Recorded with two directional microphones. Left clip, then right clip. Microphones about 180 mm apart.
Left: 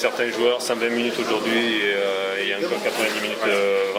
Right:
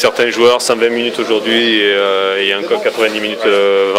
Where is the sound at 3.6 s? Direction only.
50° right (ahead or behind).